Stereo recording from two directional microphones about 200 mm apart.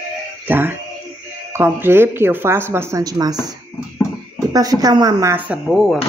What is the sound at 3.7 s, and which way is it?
Music, 10° left (ahead or behind).